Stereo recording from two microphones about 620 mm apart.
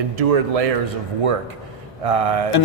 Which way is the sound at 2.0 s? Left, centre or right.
Right.